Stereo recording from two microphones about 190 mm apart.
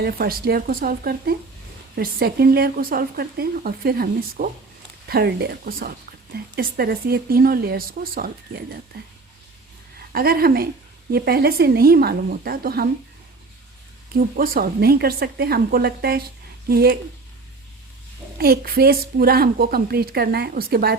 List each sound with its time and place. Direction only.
0.0 s a woman's voice: 50° right (ahead or behind)
10.1 s a woman's voice: 50° right (ahead or behind)
14.3 s a woman's voice: 50° right (ahead or behind)
18.3 s a woman's voice: 50° right (ahead or behind)